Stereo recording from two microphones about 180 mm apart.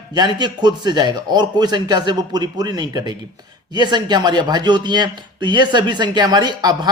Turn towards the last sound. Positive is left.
turn(degrees=-25)  # may be behind; listen again after turning